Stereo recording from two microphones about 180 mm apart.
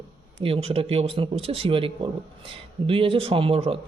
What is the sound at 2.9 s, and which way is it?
Speech, 30° right (ahead or behind).